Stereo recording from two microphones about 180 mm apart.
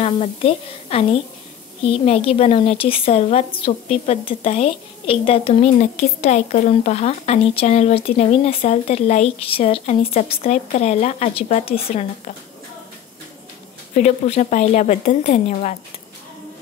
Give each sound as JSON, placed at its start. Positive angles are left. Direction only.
{"t": 0.0, "sound": "a woman's voice", "side_deg": 35}
{"t": 13.9, "sound": "a woman's voice", "side_deg": 40}